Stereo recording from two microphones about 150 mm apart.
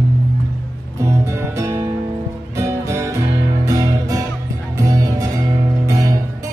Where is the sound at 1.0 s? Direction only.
20° right (ahead or behind).